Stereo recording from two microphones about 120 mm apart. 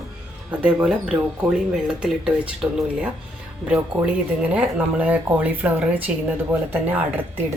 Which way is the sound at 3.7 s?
10° right (ahead or behind).